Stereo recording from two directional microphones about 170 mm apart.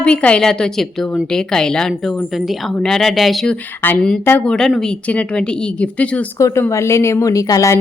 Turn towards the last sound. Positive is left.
turn(degrees=20)  # may be behind; listen again after turning